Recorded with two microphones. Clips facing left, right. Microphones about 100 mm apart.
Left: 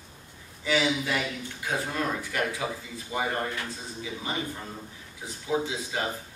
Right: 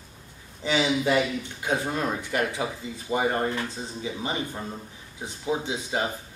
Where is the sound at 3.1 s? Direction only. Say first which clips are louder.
Right 4 dB; 35° right (ahead or behind).